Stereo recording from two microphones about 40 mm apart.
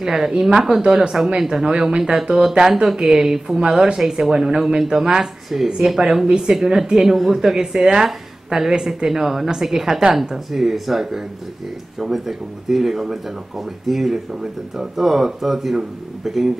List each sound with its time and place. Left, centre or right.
0.0 s speech: centre
6.5 s speech: centre